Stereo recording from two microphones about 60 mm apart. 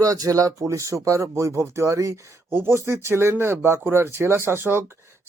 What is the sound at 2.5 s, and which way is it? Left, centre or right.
Speech, right.